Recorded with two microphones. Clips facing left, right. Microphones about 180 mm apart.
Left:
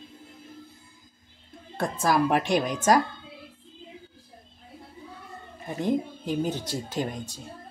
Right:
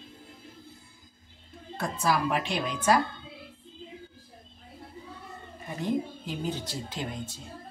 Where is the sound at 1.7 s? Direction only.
50° left (ahead or behind).